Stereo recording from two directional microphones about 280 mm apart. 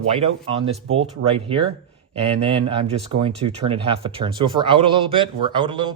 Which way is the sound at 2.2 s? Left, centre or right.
Centre.